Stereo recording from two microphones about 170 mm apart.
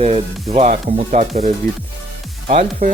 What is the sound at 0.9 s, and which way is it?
Speech, 45° right (ahead or behind).